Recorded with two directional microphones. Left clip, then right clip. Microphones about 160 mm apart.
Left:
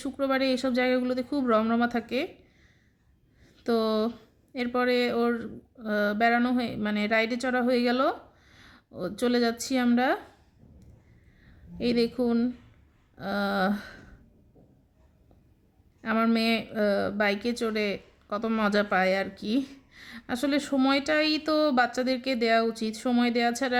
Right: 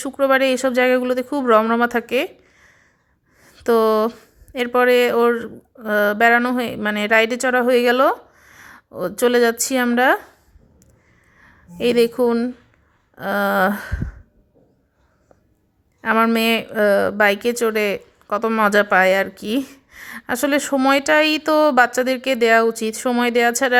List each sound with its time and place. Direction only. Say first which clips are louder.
0.0 s speech: right 11 dB; 20° right (ahead or behind)
11.8 s speech: right 11 dB; 20° right (ahead or behind)
16.0 s speech: right 10 dB; 15° right (ahead or behind)